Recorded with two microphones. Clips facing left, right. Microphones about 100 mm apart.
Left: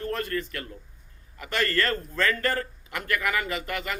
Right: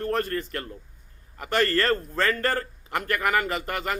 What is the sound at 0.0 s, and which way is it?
A man's voice, 45° right (ahead or behind).